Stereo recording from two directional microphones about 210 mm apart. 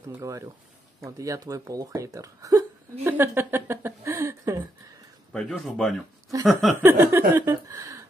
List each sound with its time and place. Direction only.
0.1 s speech: 15° right (ahead or behind)
5.3 s speech: 5° left (ahead or behind); by 8.0 s 15° right (ahead or behind)